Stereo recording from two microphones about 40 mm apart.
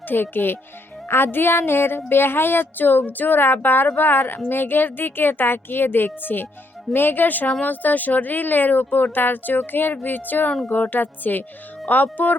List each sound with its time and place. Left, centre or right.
0.1 s a woman's voice: left
1.1 s music: left
2.0 s a woman's voice: left